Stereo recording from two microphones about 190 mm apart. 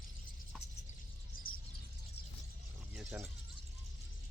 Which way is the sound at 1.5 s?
50° left (ahead or behind).